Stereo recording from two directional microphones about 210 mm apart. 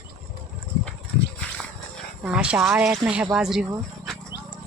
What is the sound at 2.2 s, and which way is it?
Speech, 5° right (ahead or behind).